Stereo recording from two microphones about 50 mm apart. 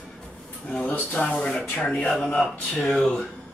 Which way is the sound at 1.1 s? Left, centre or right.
Centre.